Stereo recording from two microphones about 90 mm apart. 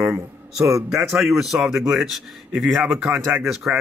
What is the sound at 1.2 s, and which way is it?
A man's voice, 5° right (ahead or behind).